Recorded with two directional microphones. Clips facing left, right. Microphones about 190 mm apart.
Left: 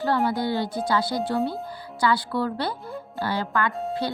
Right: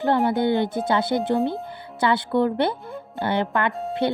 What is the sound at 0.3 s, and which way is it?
Speech, 20° right (ahead or behind).